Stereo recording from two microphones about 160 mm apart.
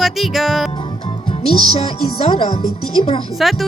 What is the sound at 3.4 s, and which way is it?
Speech, centre (ahead or behind).